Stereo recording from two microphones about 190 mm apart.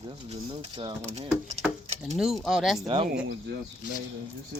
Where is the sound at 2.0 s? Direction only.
Centre (ahead or behind).